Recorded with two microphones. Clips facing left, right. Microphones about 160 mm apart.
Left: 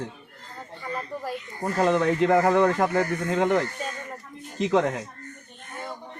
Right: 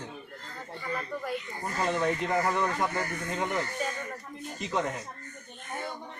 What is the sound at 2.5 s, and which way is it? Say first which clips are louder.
Speech: left 8 dB; 85° left.